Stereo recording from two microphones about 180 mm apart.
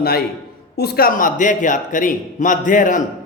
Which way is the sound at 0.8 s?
60° left (ahead or behind).